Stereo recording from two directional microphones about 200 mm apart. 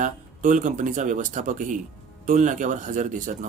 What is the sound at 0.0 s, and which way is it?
Speech, 40° right (ahead or behind).